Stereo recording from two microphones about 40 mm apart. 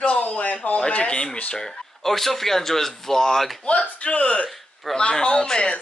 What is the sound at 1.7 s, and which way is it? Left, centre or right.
Speech, centre.